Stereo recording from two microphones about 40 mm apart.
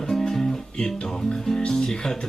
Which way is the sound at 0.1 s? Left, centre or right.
Centre.